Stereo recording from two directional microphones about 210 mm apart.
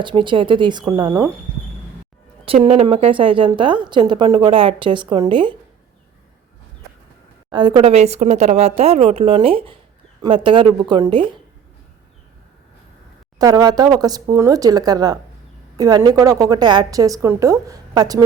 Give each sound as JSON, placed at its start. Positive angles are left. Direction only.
{"t": 0.0, "sound": "a woman's voice", "side_deg": -20}
{"t": 2.4, "sound": "a woman's voice", "side_deg": -30}
{"t": 7.5, "sound": "a woman's voice", "side_deg": -20}
{"t": 13.4, "sound": "a woman's voice", "side_deg": -20}